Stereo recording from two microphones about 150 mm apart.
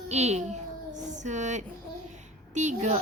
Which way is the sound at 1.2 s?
50° right (ahead or behind).